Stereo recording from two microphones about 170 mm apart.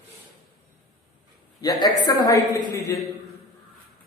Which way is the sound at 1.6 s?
20° left (ahead or behind).